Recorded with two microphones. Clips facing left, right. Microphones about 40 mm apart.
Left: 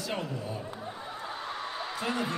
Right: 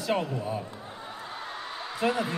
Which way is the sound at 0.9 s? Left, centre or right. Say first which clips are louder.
Left 1 dB; centre.